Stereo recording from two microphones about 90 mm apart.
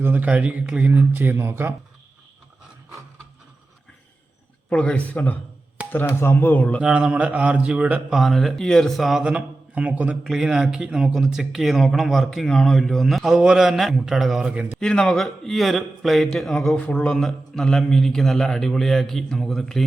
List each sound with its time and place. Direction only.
0.0 s speech: 20° right (ahead or behind)
4.7 s speech: 15° left (ahead or behind)
6.8 s speech: 10° right (ahead or behind)
8.1 s a man's voice: centre (ahead or behind)
10.2 s a man's voice: 5° right (ahead or behind)
14.8 s a man's voice: 10° left (ahead or behind)